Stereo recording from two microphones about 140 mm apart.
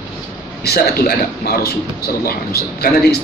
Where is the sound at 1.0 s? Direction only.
90° left.